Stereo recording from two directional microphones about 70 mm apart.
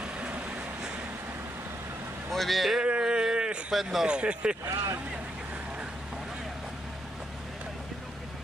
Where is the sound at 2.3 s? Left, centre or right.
Centre.